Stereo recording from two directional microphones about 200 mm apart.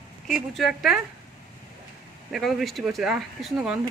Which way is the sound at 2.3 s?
Centre (ahead or behind).